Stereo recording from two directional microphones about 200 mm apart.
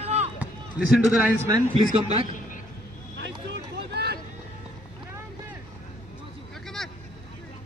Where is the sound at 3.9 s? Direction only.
55° right (ahead or behind).